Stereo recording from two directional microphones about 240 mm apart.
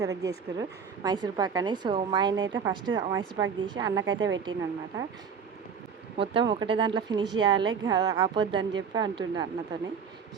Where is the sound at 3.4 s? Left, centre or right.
Centre.